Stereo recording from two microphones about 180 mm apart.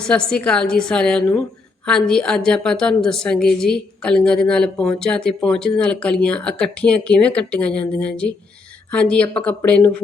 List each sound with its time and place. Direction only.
0.0 s a woman's voice: 5° left (ahead or behind)